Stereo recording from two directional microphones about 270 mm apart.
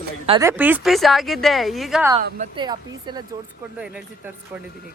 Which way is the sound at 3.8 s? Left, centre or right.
Centre.